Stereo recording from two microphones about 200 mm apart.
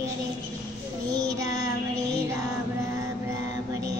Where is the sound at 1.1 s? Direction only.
20° right (ahead or behind).